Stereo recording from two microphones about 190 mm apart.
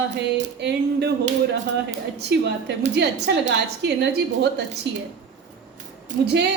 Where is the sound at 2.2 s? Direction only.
60° right (ahead or behind).